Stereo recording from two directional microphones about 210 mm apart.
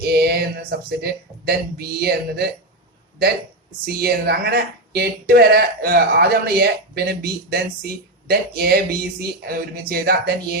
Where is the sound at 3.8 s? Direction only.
50° right (ahead or behind).